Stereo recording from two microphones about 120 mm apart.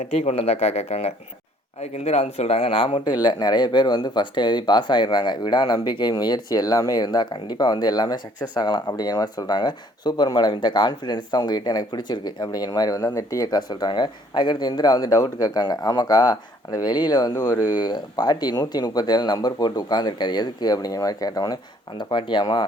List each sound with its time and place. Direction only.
0.0 s speech: 65° left (ahead or behind); by 3.0 s 50° left (ahead or behind)
3.0 s speech: 35° left (ahead or behind)